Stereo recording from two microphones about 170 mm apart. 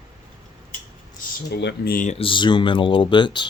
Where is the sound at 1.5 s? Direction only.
80° left; by 2.1 s 55° left (ahead or behind).